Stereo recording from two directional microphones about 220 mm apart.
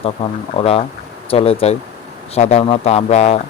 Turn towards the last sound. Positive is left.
turn(degrees=30)  # may be behind; listen again after turning